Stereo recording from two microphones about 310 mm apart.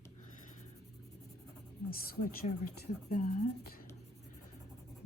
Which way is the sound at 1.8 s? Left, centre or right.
Left.